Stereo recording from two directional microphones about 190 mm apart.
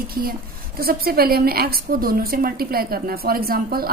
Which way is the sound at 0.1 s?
50° right (ahead or behind).